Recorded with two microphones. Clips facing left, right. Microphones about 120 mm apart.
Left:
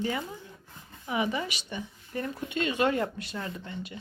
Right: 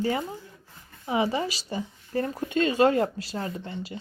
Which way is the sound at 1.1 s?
30° right (ahead or behind).